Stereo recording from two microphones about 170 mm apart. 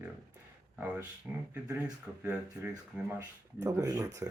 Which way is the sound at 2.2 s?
10° right (ahead or behind).